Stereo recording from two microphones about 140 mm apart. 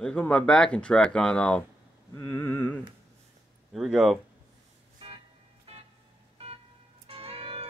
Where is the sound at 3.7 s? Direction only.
5° right (ahead or behind).